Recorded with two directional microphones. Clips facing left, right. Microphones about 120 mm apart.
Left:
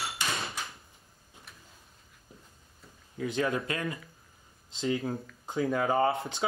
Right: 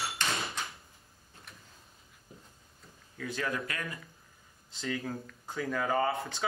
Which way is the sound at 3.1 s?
20° left (ahead or behind).